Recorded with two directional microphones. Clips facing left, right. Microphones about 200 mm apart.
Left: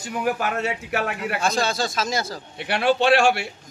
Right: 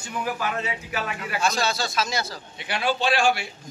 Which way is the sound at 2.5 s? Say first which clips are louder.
Left 6 dB; 65° left (ahead or behind).